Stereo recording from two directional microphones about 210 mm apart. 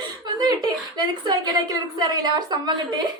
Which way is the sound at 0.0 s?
20° right (ahead or behind).